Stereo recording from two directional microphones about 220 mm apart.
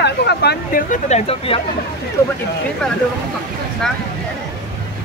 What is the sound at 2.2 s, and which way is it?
Speech, 15° left (ahead or behind).